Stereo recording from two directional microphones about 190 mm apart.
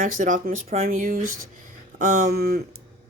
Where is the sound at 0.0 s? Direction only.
45° right (ahead or behind).